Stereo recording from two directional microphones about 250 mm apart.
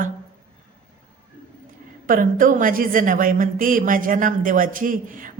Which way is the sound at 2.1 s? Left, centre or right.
Right.